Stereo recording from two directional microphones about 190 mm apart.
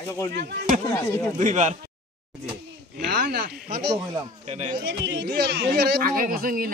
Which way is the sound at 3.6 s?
55° right (ahead or behind).